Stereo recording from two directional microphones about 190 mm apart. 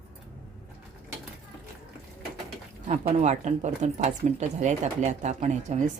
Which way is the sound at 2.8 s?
40° right (ahead or behind).